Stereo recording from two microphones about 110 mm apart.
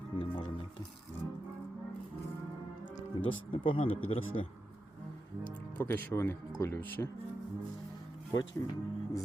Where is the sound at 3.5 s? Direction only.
55° left (ahead or behind).